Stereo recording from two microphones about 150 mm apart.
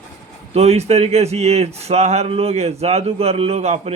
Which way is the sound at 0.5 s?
45° right (ahead or behind).